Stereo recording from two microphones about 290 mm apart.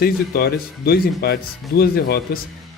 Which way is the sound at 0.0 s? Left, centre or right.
Left.